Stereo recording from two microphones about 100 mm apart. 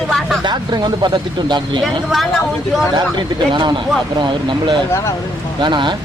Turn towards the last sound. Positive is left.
turn(degrees=-50)  # may be behind; listen again after turning